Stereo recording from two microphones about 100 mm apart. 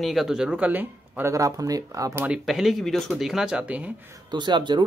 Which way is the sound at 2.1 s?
15° right (ahead or behind).